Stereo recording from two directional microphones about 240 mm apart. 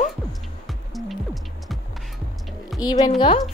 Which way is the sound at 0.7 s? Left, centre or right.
Centre.